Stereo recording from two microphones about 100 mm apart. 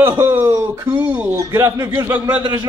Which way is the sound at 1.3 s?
30° right (ahead or behind).